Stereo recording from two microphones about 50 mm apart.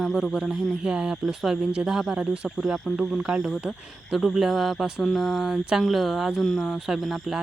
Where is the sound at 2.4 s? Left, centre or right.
Centre.